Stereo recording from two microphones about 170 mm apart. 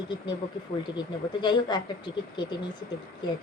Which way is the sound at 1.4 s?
25° left (ahead or behind).